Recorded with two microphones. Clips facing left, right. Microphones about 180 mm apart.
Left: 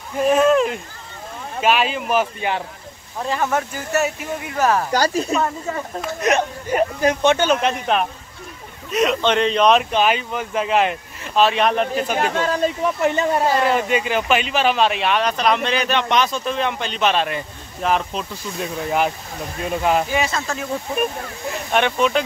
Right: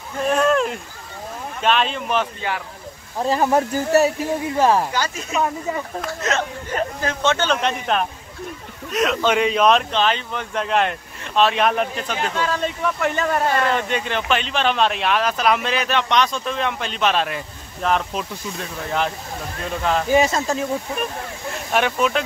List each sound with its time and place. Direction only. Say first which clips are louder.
0.2 s speech: left 3 dB; 5° left (ahead or behind)
2.4 s speech: left 3 dB; 15° left (ahead or behind)
3.2 s speech: right 3 dB; 35° right (ahead or behind)
4.9 s speech: left 6 dB; 35° left (ahead or behind)
6.2 s speech: left 6 dB; 15° left (ahead or behind); by 9.8 s centre (ahead or behind)
9.8 s speech: left 2 dB; 10° left (ahead or behind)
12.2 s speech: left 2 dB; 45° left (ahead or behind)
13.0 s speech: left 3 dB; 20° left (ahead or behind)
13.5 s speech: left 2 dB; 10° left (ahead or behind)
20.2 s speech: right 4 dB; 40° right (ahead or behind)
21.7 s speech: left 1 dB; 5° right (ahead or behind)